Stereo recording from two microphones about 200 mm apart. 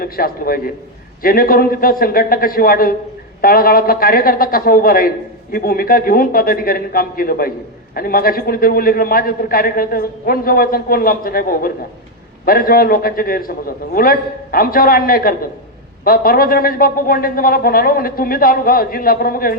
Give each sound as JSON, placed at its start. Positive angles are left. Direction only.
{"t": 0.0, "sound": "a man's voice", "side_deg": 45}